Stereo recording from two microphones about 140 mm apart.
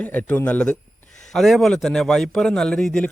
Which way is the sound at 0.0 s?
10° left (ahead or behind).